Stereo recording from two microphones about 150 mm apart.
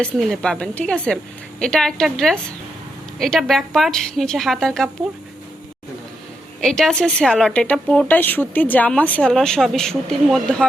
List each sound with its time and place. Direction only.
0.0 s a woman's voice: 5° left (ahead or behind)
6.6 s a woman's voice: centre (ahead or behind)